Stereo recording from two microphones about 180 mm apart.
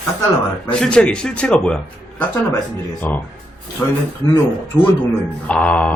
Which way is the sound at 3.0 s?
10° left (ahead or behind).